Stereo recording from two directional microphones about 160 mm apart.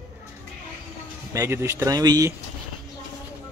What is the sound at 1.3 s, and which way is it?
Speech, 15° right (ahead or behind).